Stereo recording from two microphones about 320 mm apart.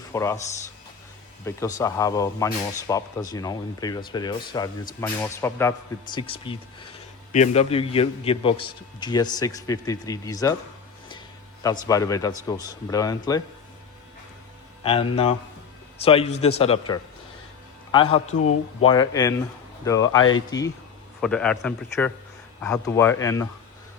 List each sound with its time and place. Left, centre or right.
0.1 s speech: centre
1.5 s speech: centre
11.6 s speech: centre
14.8 s a man's voice: centre
18.3 s speech: left
18.9 s a man's voice: centre